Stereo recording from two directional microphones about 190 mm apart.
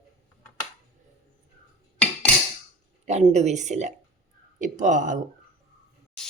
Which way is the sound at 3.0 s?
35° right (ahead or behind).